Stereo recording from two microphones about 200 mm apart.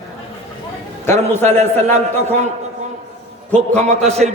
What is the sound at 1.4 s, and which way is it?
A man's voice, 35° right (ahead or behind).